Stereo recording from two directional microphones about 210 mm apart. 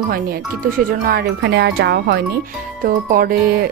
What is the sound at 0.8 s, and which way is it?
Music, 45° right (ahead or behind).